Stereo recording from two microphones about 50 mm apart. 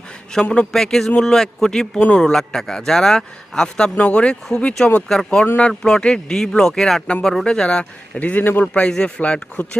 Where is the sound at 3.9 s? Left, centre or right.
Left.